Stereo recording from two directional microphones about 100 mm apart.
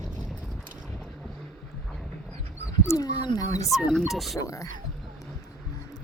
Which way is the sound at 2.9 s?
35° left (ahead or behind).